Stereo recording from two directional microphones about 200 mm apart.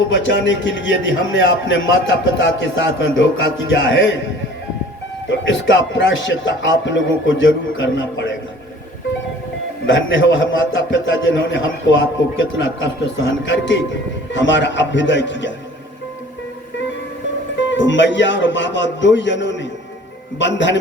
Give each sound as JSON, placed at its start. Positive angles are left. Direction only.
{"t": 0.1, "sound": "a man's voice", "side_deg": 65}
{"t": 5.3, "sound": "a man's voice", "side_deg": 65}
{"t": 9.8, "sound": "a man's voice", "side_deg": 70}
{"t": 17.7, "sound": "a man's voice", "side_deg": 65}